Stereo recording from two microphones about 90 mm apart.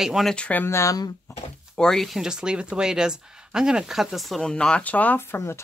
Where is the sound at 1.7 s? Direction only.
5° left (ahead or behind).